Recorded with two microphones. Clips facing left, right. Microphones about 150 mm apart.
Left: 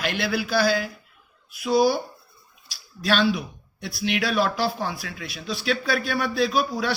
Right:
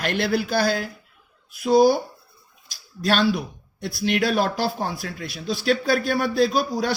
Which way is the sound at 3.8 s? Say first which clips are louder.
Right 3 dB; 50° right (ahead or behind).